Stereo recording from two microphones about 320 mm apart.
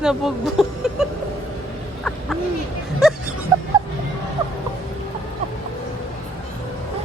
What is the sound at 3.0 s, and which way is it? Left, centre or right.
Music, centre.